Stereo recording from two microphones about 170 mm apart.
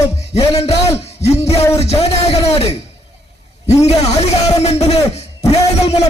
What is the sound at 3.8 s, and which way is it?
A man's voice, 40° left (ahead or behind).